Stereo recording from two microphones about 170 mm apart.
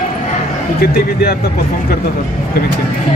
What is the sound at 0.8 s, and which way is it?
Speech, 65° left (ahead or behind).